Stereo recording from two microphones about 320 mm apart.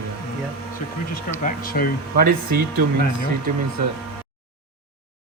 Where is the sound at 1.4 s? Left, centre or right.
Left.